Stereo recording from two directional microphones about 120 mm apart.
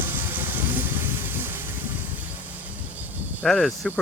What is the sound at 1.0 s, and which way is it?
Vehicle, 15° right (ahead or behind).